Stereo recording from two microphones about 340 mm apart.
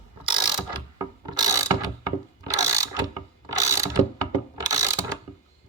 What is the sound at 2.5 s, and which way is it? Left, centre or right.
Ratchet, centre.